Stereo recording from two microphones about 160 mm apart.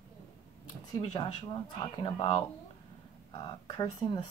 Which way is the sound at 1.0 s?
40° left (ahead or behind).